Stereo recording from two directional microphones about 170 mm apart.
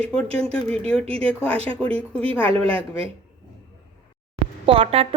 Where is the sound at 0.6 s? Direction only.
35° right (ahead or behind).